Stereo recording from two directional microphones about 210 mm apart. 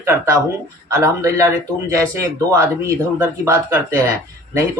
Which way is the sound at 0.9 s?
15° right (ahead or behind).